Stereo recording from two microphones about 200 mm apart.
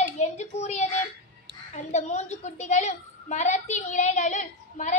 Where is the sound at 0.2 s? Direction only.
35° left (ahead or behind).